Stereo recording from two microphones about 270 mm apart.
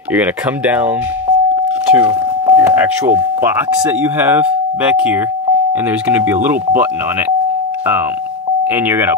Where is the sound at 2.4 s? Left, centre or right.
Centre.